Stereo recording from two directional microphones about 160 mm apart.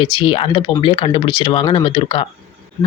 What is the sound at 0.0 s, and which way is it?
Speech, 30° left (ahead or behind).